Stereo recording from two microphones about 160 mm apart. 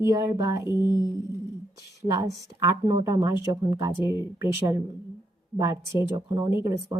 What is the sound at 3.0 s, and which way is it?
Speech, 20° right (ahead or behind).